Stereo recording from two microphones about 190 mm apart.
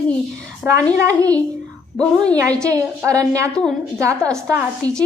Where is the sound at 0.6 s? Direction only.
15° right (ahead or behind).